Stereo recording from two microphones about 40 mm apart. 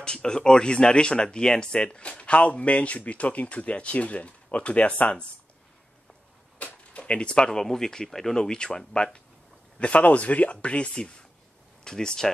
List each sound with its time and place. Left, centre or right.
0.0 s speech: left
6.6 s speech: left
9.8 s speech: left; by 12.3 s centre